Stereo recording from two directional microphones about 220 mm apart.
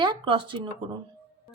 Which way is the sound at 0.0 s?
20° right (ahead or behind).